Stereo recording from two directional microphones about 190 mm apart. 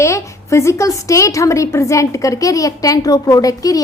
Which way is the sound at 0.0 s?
15° left (ahead or behind).